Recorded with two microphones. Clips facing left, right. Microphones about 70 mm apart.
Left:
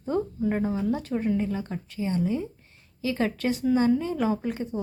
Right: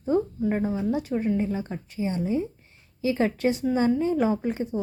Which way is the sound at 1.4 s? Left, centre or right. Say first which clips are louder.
Right 1 dB; centre.